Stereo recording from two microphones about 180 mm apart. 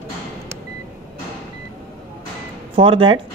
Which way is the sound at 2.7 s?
30° right (ahead or behind).